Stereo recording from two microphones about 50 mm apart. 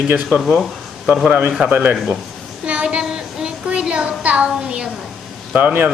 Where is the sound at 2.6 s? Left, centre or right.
Right.